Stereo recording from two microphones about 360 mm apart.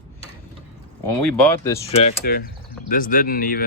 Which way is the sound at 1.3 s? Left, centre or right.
Centre.